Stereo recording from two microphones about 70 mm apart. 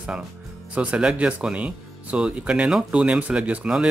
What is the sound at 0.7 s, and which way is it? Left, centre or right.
Speech, centre.